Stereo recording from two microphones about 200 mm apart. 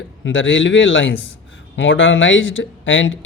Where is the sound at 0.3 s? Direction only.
75° left (ahead or behind).